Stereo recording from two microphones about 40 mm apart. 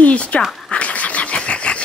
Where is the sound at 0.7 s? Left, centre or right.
Left.